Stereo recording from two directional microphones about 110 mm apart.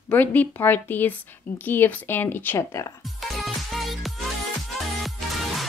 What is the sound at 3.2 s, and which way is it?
Music, centre (ahead or behind).